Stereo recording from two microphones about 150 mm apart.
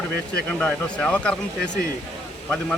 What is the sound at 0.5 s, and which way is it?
Speech, 10° left (ahead or behind).